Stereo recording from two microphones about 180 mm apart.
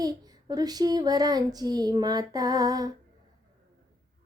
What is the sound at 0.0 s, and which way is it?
Speech, 20° right (ahead or behind).